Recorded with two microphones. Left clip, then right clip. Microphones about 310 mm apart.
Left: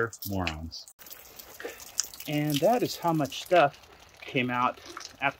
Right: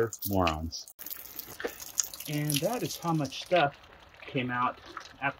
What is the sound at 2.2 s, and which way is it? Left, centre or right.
Speech, centre.